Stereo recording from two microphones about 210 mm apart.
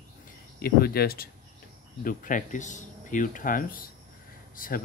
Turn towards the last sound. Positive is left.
turn(degrees=40)  # may be behind; listen again after turning